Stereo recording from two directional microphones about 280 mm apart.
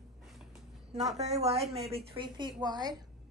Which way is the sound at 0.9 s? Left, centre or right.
Right.